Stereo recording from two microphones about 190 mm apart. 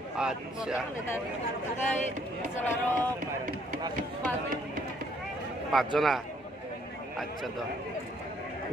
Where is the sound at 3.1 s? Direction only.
45° right (ahead or behind).